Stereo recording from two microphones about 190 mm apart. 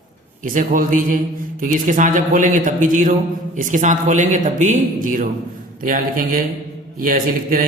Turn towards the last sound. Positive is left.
turn(degrees=-45)  # may be behind; listen again after turning